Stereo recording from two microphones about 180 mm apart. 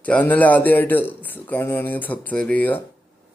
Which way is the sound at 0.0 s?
10° left (ahead or behind).